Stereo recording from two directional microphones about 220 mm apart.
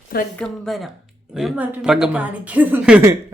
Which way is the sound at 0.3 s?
Centre (ahead or behind).